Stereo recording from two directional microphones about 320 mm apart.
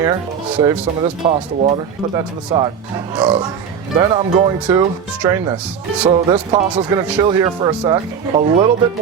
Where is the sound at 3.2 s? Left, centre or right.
Centre.